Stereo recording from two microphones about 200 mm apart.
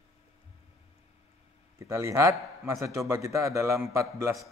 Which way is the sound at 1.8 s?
15° right (ahead or behind).